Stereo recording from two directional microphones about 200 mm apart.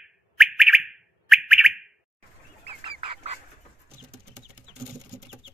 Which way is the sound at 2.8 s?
30° right (ahead or behind).